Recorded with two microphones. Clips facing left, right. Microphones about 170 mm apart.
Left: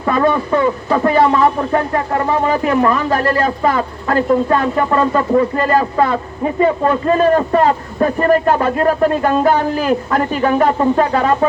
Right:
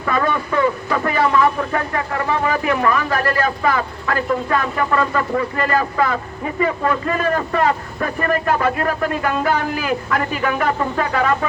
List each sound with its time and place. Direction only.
0.0 s speech: 30° left (ahead or behind)